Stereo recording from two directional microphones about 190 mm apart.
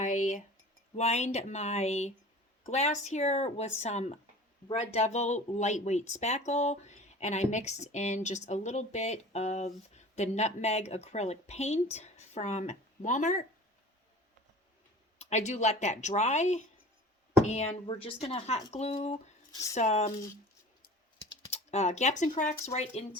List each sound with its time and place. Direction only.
0.0 s a sound: 40° left (ahead or behind)
0.9 s speech: 35° left (ahead or behind)
15.2 s speech: 40° left (ahead or behind)
21.5 s speech: 35° left (ahead or behind)